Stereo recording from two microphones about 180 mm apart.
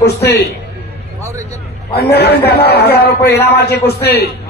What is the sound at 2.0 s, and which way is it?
A man's voice, 65° left (ahead or behind).